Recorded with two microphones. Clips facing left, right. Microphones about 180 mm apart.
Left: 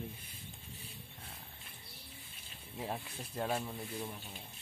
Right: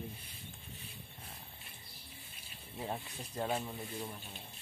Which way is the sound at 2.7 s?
Centre (ahead or behind).